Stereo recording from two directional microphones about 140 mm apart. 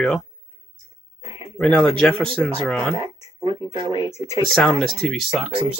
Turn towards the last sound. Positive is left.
turn(degrees=0)  # may be behind; listen again after turning